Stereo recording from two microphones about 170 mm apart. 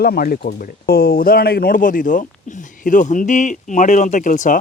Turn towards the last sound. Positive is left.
turn(degrees=50)  # may be behind; listen again after turning